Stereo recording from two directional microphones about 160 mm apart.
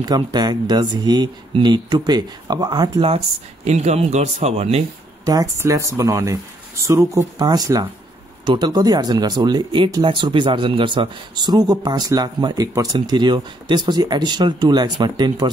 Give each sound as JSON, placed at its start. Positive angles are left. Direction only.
{"t": 0.0, "sound": "speech", "side_deg": -25}
{"t": 3.6, "sound": "speech", "side_deg": -45}
{"t": 5.2, "sound": "speech", "side_deg": -20}